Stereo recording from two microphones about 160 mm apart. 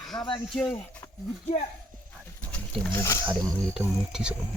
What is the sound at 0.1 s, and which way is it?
Speech, 30° left (ahead or behind).